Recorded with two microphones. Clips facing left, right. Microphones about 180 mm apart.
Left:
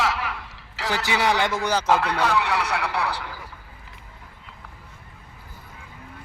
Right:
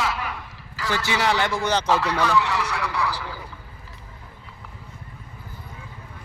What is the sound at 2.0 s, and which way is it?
A man's voice, 60° left (ahead or behind).